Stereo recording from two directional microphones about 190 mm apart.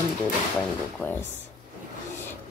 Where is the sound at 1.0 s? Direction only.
10° left (ahead or behind).